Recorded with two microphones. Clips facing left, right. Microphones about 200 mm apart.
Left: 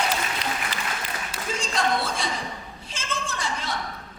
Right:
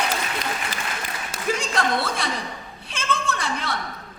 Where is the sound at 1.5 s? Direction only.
60° right (ahead or behind).